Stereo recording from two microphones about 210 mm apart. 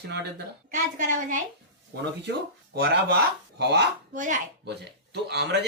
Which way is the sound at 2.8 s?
50° right (ahead or behind).